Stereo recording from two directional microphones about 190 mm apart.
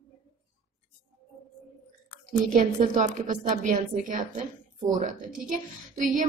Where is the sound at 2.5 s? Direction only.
45° right (ahead or behind).